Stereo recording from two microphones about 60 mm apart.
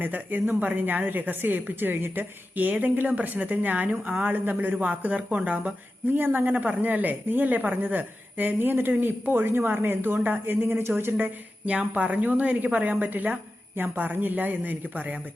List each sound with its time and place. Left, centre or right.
0.0 s a woman's voice: right
6.1 s a woman's voice: right
11.6 s a woman's voice: right